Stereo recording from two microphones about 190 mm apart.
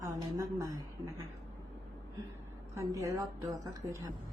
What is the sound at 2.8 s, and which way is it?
Speech, 15° right (ahead or behind).